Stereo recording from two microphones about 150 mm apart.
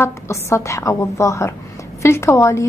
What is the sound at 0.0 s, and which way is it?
A woman's voice, 20° left (ahead or behind).